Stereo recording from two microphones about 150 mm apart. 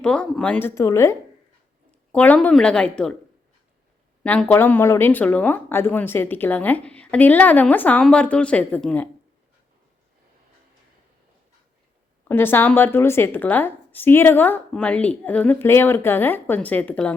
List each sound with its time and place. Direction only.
0.0 s speech: 5° left (ahead or behind)
0.8 s speech: 20° left (ahead or behind)
2.1 s speech: 10° left (ahead or behind)
4.2 s speech: 10° left (ahead or behind)
12.3 s speech: 15° left (ahead or behind)